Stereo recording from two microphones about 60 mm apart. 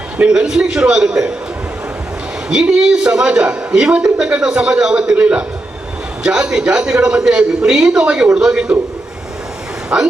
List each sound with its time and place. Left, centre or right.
0.2 s a man's voice: centre
2.5 s a man's voice: centre
9.9 s a man's voice: right